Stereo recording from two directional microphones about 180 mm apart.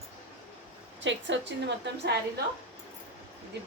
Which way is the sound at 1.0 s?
85° right.